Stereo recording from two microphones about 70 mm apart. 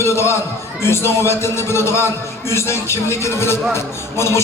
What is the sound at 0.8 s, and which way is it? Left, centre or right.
A man's voice, left.